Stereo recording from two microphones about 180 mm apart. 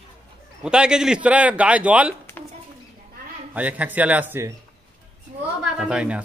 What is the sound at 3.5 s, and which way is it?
A man's voice, 10° right (ahead or behind).